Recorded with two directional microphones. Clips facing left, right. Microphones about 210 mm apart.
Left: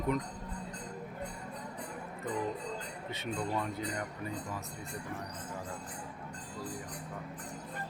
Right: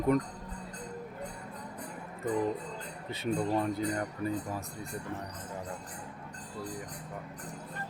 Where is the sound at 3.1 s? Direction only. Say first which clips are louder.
Right 6 dB; 30° right (ahead or behind).